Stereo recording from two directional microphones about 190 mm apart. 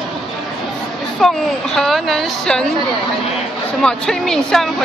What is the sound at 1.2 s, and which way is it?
A woman's voice, centre (ahead or behind).